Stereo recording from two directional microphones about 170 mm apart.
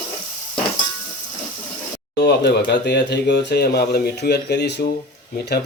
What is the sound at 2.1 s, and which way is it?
Speech, 75° left (ahead or behind).